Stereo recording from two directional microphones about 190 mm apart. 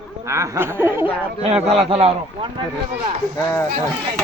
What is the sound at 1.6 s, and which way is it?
Speech, 35° right (ahead or behind).